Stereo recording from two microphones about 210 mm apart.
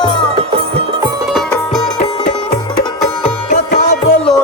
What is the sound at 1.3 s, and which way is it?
Music, centre (ahead or behind).